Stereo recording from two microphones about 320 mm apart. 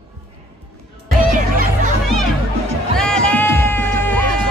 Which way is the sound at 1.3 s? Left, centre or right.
Right.